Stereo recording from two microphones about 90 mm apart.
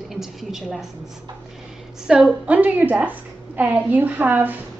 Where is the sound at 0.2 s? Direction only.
5° right (ahead or behind).